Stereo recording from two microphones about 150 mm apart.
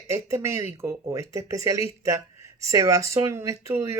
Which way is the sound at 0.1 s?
20° right (ahead or behind).